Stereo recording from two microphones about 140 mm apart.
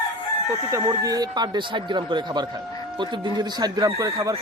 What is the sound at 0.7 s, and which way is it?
Speech, 25° right (ahead or behind).